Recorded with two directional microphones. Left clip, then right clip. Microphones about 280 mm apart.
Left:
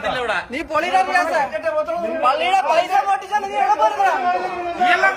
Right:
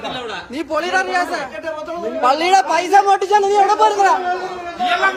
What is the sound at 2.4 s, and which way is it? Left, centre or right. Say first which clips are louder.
Speech: right 2 dB; centre.